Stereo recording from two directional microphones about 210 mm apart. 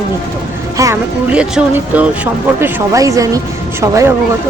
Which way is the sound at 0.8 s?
10° right (ahead or behind).